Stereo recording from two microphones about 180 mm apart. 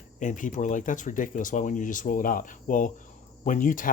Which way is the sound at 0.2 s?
45° left (ahead or behind).